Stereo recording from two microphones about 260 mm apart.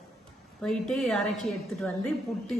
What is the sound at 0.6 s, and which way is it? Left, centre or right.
A woman's voice, centre.